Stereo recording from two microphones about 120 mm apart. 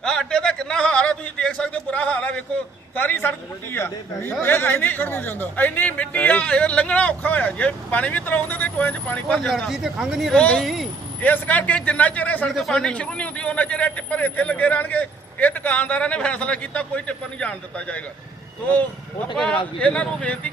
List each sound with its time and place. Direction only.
0.0 s a sound: 5° left (ahead or behind)
2.9 s speech: 15° left (ahead or behind); by 10.8 s centre (ahead or behind)
11.2 s speech: 15° left (ahead or behind)
12.5 s speech: centre (ahead or behind)
19.8 s speech: 10° left (ahead or behind)